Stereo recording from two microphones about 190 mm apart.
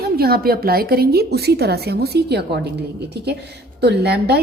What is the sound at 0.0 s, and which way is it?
A woman's voice, 55° right (ahead or behind).